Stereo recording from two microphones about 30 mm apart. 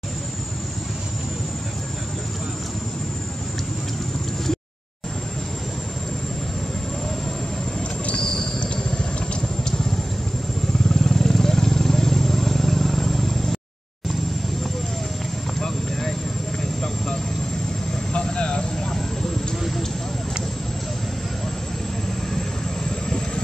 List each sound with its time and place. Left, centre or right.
8.5 s vehicle: left
11.0 s vehicle: centre
15.6 s vehicle: centre
18.1 s vehicle: left
22.8 s vehicle: left